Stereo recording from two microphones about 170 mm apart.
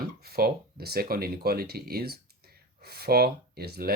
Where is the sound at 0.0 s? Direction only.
65° right (ahead or behind).